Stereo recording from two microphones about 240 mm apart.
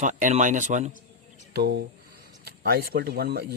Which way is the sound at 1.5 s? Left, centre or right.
Right.